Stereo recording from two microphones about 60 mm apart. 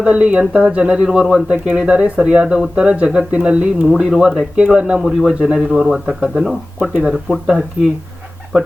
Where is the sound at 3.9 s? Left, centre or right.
Centre.